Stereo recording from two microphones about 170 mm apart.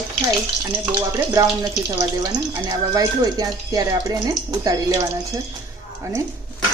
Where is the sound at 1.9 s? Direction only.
20° right (ahead or behind).